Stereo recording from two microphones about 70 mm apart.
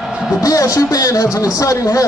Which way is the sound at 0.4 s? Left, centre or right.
Left.